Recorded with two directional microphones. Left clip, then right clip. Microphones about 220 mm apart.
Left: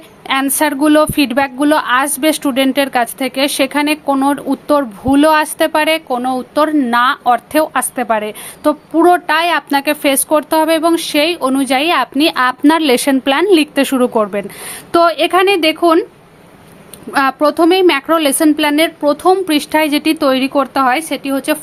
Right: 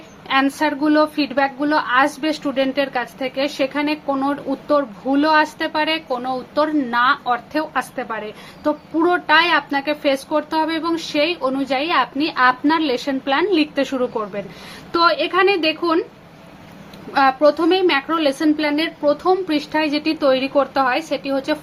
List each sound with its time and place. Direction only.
0.3 s a woman's voice: 55° left (ahead or behind)
17.1 s a woman's voice: 50° left (ahead or behind)